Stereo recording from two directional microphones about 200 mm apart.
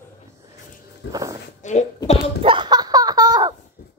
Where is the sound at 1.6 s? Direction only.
35° left (ahead or behind).